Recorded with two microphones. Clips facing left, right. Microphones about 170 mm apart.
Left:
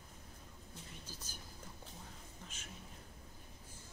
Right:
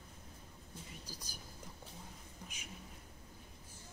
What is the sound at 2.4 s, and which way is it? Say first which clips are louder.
Speech: right 2 dB; 15° right (ahead or behind).